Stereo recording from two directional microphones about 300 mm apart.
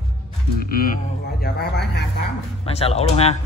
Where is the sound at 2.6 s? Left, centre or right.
Centre.